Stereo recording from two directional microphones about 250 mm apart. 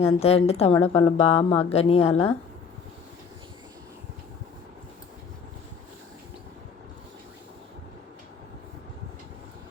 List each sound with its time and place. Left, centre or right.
0.0 s a woman's voice: left